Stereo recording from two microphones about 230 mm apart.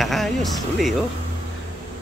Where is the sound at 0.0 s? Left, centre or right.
Centre.